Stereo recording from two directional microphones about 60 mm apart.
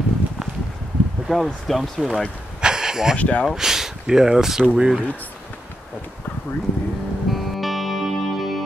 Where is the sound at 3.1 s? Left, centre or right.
Left.